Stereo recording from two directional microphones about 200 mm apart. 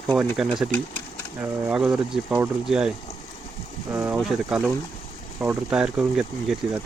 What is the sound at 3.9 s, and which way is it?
Speech, 15° right (ahead or behind).